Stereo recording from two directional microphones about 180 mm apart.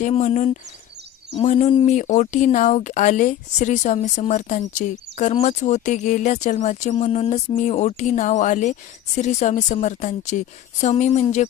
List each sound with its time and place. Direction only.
0.0 s speech: 35° left (ahead or behind)